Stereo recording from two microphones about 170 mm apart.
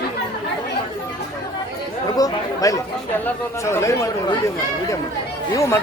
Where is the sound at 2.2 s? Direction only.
20° left (ahead or behind).